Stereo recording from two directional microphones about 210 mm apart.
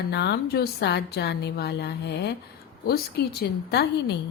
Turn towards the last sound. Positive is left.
turn(degrees=55)  # may be behind; listen again after turning